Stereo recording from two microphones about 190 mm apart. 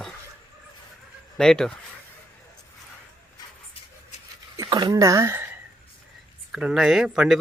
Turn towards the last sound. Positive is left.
turn(degrees=-5)  # may be behind; listen again after turning